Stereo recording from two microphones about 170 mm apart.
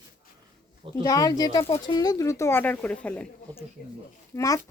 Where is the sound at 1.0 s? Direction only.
20° left (ahead or behind).